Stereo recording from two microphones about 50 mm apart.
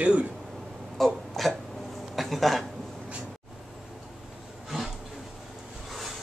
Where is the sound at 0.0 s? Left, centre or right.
Right.